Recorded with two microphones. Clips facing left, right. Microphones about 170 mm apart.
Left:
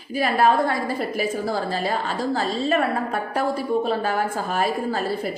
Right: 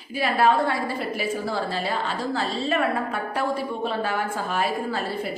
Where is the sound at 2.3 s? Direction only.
40° left (ahead or behind).